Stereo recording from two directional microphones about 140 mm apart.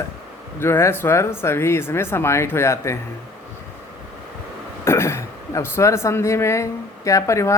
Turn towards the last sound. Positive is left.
turn(degrees=20)  # may be behind; listen again after turning